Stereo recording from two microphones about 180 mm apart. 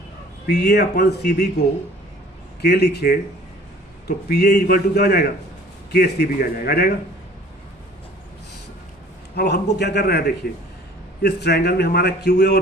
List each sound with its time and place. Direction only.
0.4 s speech: 65° left (ahead or behind)
4.3 s speech: 60° left (ahead or behind)
9.3 s a man's voice: 65° left (ahead or behind)